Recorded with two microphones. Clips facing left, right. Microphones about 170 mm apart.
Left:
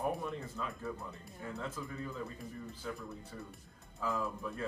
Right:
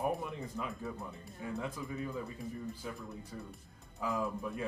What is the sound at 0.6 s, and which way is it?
A man's voice, 20° right (ahead or behind).